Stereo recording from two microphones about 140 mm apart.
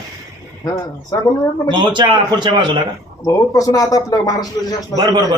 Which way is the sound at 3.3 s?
25° left (ahead or behind).